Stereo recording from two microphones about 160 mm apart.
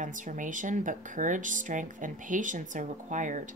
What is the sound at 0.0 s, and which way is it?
Speech, 55° right (ahead or behind).